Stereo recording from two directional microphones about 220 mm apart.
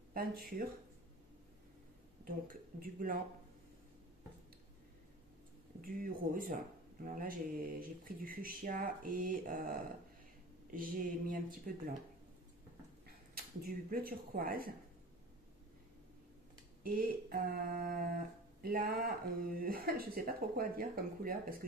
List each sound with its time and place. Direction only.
0.1 s speech: 40° right (ahead or behind)
2.8 s speech: 40° right (ahead or behind)
5.8 s speech: 40° right (ahead or behind)
13.3 s speech: 45° right (ahead or behind)
16.8 s speech: 40° right (ahead or behind)